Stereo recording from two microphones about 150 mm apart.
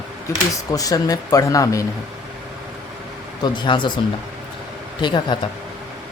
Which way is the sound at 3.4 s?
30° left (ahead or behind).